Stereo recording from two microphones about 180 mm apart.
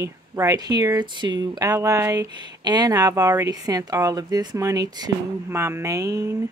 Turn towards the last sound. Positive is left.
turn(degrees=-15)  # may be behind; listen again after turning